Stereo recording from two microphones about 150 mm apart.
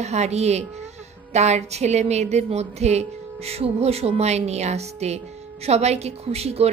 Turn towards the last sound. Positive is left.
turn(degrees=-45)  # may be behind; listen again after turning